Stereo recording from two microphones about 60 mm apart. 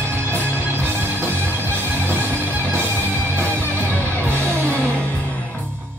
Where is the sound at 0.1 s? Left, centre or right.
Right.